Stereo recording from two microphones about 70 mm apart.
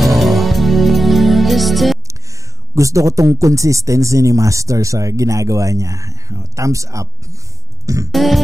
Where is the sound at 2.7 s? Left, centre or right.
Right.